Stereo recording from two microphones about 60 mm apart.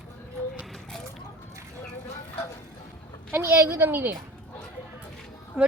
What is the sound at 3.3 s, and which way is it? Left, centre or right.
Speech, right.